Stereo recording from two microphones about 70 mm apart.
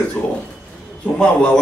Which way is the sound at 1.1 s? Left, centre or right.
Centre.